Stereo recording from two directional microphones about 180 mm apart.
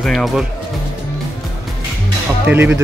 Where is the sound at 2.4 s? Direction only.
10° right (ahead or behind).